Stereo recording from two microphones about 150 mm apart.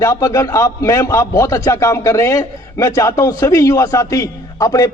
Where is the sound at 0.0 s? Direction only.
20° left (ahead or behind).